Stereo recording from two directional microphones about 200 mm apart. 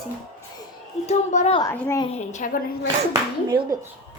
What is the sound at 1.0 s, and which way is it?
Speech, 35° left (ahead or behind).